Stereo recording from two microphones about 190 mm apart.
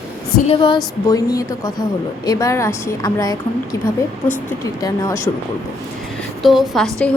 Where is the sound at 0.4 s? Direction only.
25° left (ahead or behind).